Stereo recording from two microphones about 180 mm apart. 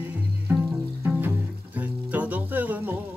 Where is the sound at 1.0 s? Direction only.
10° right (ahead or behind).